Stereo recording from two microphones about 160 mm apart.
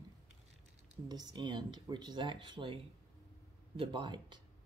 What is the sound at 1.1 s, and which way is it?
Speech, 25° right (ahead or behind).